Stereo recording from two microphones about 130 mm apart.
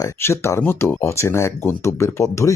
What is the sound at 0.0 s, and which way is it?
Speech, 20° left (ahead or behind).